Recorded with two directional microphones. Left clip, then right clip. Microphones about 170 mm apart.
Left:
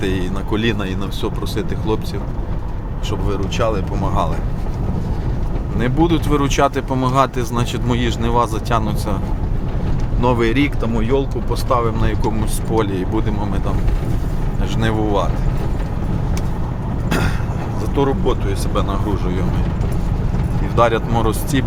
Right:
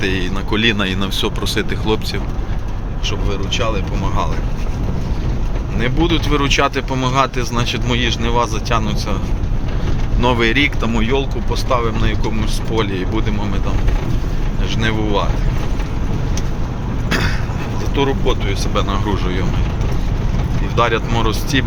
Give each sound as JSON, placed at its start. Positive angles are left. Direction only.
{"t": 0.0, "sound": "speech", "side_deg": 20}
{"t": 3.1, "sound": "speech", "side_deg": 45}
{"t": 5.8, "sound": "speech", "side_deg": 25}
{"t": 10.2, "sound": "speech", "side_deg": 15}
{"t": 10.8, "sound": "speech", "side_deg": 5}
{"t": 11.5, "sound": "speech", "side_deg": 25}
{"t": 14.8, "sound": "speech", "side_deg": 25}
{"t": 17.1, "sound": "vehicle", "side_deg": 25}
{"t": 17.9, "sound": "speech", "side_deg": 25}
{"t": 20.7, "sound": "speech", "side_deg": 25}